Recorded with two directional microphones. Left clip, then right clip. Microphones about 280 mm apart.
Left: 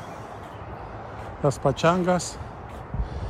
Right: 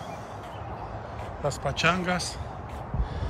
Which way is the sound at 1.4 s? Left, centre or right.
Centre.